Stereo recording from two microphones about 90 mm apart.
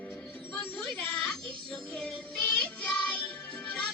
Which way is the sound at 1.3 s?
10° left (ahead or behind).